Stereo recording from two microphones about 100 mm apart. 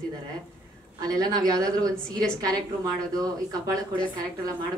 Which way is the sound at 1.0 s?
40° right (ahead or behind).